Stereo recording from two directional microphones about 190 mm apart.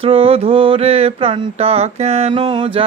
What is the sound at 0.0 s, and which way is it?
Mantra, 30° right (ahead or behind).